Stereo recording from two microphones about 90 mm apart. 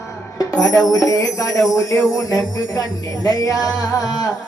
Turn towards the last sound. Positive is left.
turn(degrees=45)  # may be behind; listen again after turning